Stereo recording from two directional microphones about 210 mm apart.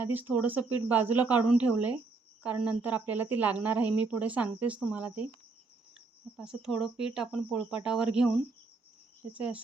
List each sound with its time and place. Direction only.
0.0 s speech: 10° right (ahead or behind)
6.3 s speech: 5° right (ahead or behind)